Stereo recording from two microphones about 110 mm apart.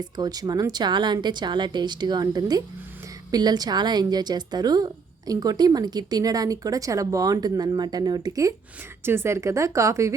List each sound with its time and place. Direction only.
0.0 s a woman's voice: 35° right (ahead or behind)
9.0 s speech: 25° right (ahead or behind)